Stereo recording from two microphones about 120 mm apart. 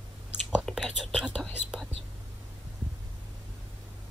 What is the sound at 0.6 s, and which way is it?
Whispering, centre (ahead or behind).